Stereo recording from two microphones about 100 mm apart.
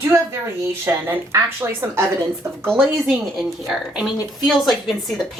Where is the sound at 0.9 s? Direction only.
25° right (ahead or behind).